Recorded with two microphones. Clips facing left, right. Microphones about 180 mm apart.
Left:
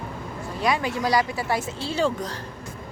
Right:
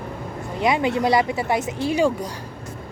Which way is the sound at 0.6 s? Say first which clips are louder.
Right 4 dB; 20° right (ahead or behind).